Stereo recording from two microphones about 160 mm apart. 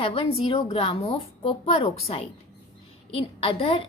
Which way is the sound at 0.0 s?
35° left (ahead or behind).